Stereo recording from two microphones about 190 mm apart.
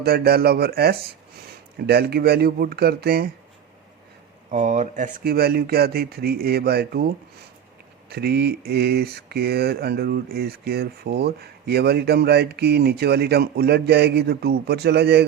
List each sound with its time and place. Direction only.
0.0 s mantra: 55° right (ahead or behind)
4.5 s mantra: 40° right (ahead or behind); by 7.1 s 55° right (ahead or behind)
8.1 s mantra: 60° right (ahead or behind)